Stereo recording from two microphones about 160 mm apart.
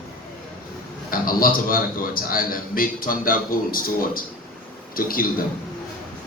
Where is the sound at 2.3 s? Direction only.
65° left (ahead or behind).